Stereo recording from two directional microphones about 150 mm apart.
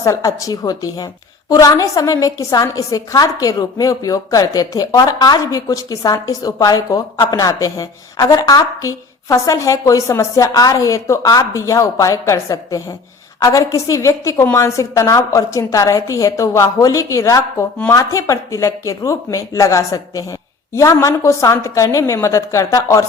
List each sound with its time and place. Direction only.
0.0 s a woman's voice: 25° left (ahead or behind)